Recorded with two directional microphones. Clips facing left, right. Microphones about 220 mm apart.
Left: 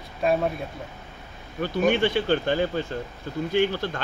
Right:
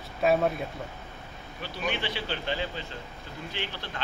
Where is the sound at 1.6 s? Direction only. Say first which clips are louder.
Left 11 dB; 50° left (ahead or behind).